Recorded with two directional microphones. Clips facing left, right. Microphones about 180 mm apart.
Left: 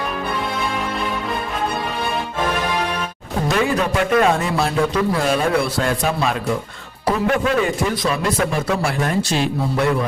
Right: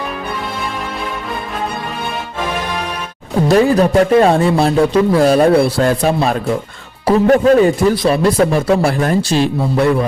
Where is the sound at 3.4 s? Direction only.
35° right (ahead or behind).